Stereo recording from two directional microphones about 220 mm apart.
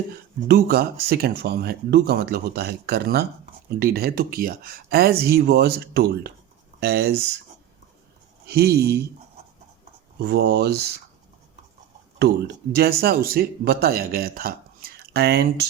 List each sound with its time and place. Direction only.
0.4 s speech: 45° right (ahead or behind)
8.4 s speech: 45° right (ahead or behind)
10.2 s speech: 50° right (ahead or behind)
12.2 s speech: 45° right (ahead or behind)